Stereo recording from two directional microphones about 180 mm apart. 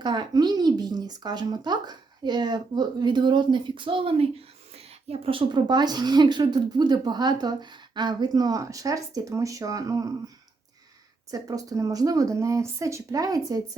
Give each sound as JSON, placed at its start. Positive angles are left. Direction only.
{"t": 0.0, "sound": "speech", "side_deg": -25}
{"t": 11.3, "sound": "speech", "side_deg": -20}